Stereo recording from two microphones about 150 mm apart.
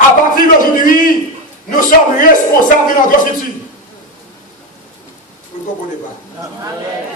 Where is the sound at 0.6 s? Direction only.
65° left (ahead or behind).